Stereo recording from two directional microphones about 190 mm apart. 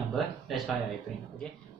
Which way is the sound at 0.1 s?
Centre (ahead or behind).